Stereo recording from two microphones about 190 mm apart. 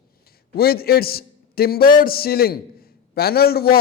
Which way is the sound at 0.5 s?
55° left (ahead or behind).